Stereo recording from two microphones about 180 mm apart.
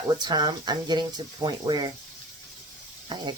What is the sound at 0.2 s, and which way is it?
Speech, 25° right (ahead or behind).